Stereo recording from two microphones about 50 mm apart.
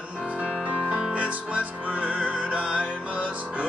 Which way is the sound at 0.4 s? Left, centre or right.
Right.